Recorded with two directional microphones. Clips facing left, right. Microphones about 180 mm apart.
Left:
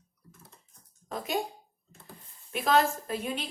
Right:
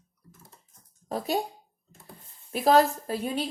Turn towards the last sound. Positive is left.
turn(degrees=-35)  # may be behind; listen again after turning